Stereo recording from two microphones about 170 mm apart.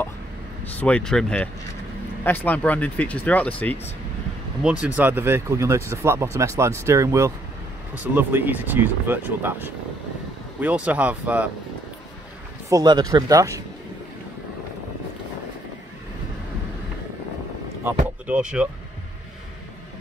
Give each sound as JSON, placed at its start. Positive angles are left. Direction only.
{"t": 0.7, "sound": "speech", "side_deg": 5}
{"t": 4.6, "sound": "speech", "side_deg": -10}
{"t": 12.6, "sound": "speech", "side_deg": -20}
{"t": 18.2, "sound": "speech", "side_deg": -5}